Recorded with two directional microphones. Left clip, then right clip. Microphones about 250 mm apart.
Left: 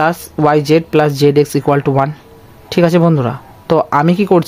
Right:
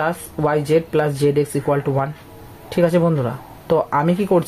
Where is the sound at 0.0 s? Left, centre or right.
Left.